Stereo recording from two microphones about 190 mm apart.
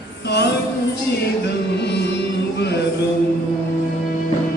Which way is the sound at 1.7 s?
65° left (ahead or behind).